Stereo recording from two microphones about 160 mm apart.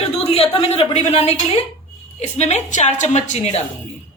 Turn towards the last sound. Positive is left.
turn(degrees=45)  # may be behind; listen again after turning